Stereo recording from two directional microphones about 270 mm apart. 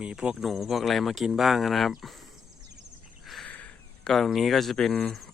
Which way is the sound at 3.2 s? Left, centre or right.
Centre.